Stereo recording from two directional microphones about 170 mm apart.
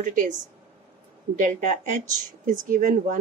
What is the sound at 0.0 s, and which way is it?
Speech, 50° right (ahead or behind).